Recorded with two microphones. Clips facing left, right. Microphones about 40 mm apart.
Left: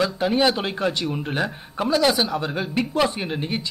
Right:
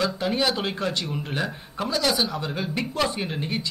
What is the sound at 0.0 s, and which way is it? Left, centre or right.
Speech, left.